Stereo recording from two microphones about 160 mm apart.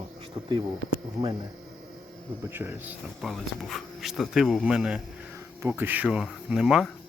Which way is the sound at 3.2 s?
Centre (ahead or behind).